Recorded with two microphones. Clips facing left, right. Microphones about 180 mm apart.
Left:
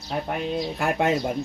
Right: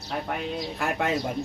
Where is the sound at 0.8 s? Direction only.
30° left (ahead or behind).